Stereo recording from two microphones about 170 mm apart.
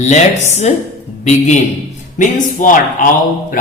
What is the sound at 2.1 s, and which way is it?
Speech, 50° left (ahead or behind).